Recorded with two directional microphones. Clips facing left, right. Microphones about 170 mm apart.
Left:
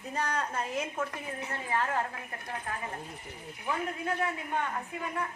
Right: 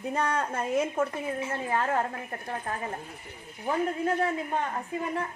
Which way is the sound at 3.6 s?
35° right (ahead or behind).